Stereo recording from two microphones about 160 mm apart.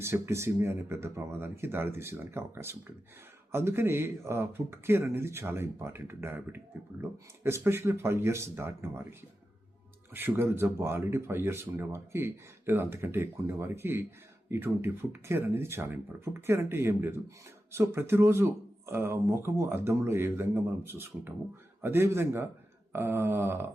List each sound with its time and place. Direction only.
0.0 s speech: 15° right (ahead or behind)